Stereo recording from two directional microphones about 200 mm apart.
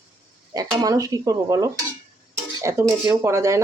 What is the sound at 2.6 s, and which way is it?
Dishes, 15° right (ahead or behind).